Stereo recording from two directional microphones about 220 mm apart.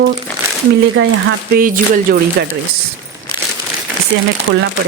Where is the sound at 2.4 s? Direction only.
50° right (ahead or behind).